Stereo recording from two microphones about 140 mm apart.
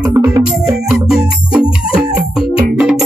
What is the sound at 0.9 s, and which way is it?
Music, 5° right (ahead or behind).